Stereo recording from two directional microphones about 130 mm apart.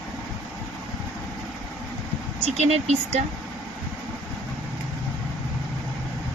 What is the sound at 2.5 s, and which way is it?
Speech, 60° right (ahead or behind).